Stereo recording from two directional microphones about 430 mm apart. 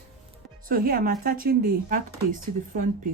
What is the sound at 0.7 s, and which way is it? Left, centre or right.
Speech, centre.